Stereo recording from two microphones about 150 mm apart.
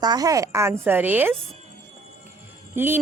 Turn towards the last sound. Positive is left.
turn(degrees=-15)  # may be behind; listen again after turning